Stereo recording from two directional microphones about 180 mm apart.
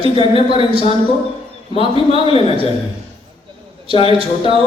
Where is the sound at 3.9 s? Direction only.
30° left (ahead or behind).